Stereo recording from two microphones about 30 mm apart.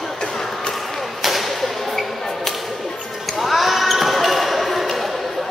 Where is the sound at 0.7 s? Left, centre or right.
Centre.